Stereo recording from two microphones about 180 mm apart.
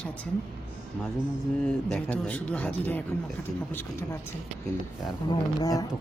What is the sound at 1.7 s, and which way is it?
Speech, 5° left (ahead or behind).